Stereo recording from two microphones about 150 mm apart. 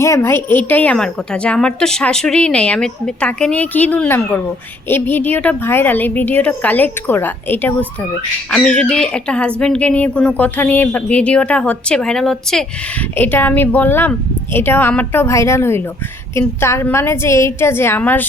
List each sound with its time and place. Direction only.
0.0 s a woman's voice: 15° left (ahead or behind)
13.1 s a woman's voice: 15° left (ahead or behind)